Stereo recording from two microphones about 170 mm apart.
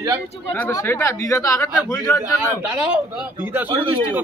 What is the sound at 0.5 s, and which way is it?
Speech, 10° left (ahead or behind).